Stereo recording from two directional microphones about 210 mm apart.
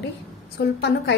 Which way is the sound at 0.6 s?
50° left (ahead or behind).